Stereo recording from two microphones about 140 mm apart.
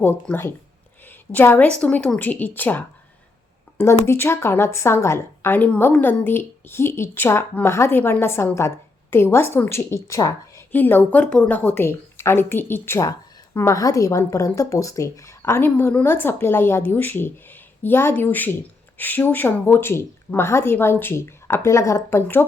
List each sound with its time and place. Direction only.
0.0 s a woman's voice: 15° left (ahead or behind)
10.7 s a woman's voice: 15° left (ahead or behind)